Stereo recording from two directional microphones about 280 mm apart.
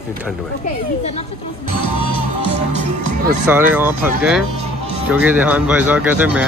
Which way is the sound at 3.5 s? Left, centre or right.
Centre.